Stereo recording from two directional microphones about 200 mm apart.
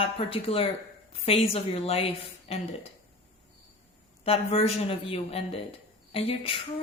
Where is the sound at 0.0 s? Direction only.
25° left (ahead or behind).